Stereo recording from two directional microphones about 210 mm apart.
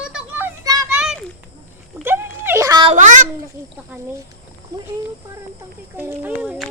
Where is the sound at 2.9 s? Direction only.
35° right (ahead or behind).